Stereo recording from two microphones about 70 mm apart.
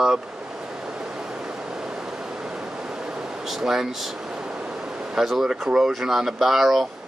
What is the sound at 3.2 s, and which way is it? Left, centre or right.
Speech, centre.